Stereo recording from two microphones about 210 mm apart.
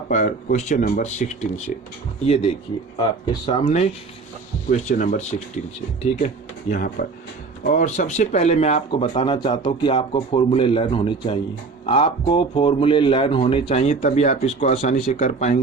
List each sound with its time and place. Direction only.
0.1 s speech: 40° left (ahead or behind)